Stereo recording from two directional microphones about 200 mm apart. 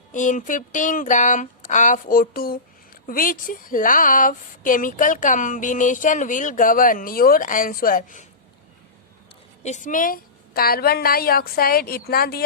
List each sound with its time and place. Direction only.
0.1 s speech: 40° left (ahead or behind)
9.6 s a woman's voice: 40° left (ahead or behind)